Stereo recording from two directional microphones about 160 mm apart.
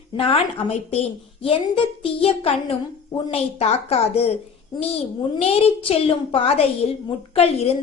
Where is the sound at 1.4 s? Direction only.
35° left (ahead or behind).